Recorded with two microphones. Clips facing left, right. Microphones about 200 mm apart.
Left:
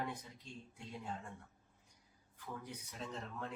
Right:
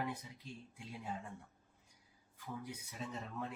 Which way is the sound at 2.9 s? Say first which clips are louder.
Even; 5° right (ahead or behind).